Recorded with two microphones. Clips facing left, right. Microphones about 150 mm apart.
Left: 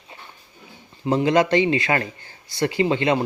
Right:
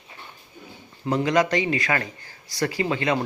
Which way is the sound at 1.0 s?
25° left (ahead or behind).